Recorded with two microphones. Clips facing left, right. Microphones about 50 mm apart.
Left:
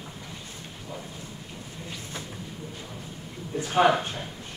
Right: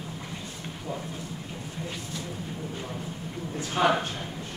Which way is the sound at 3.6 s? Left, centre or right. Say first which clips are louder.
Left 4 dB; left.